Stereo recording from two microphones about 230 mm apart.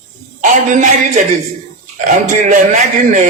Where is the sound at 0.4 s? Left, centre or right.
Right.